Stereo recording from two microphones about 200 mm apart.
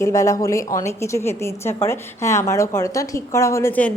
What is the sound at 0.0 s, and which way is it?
A woman's voice, 15° left (ahead or behind).